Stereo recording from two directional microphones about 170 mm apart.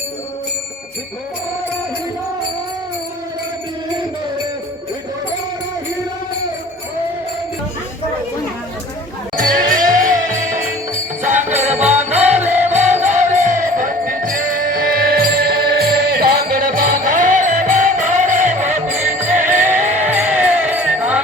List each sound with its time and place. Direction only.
9.4 s music: 55° right (ahead or behind); by 11.8 s 40° right (ahead or behind)
11.8 s music: 10° right (ahead or behind)
12.6 s music: 40° right (ahead or behind)
19.7 s music: 45° right (ahead or behind)
20.1 s music: 10° right (ahead or behind)